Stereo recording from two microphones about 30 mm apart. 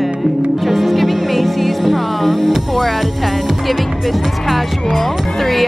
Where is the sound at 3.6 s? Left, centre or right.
Centre.